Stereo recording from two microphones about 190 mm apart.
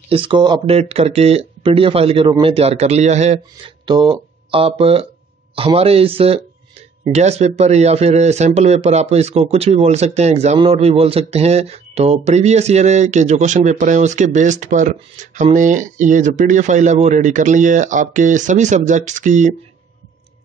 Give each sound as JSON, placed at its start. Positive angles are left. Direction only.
{"t": 0.1, "sound": "speech", "side_deg": -25}
{"t": 3.8, "sound": "speech", "side_deg": -25}